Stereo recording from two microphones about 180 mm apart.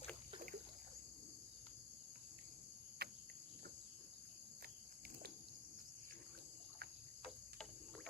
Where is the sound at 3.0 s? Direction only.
60° right (ahead or behind).